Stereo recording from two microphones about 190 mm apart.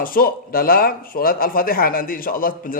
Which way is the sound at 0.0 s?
50° left (ahead or behind).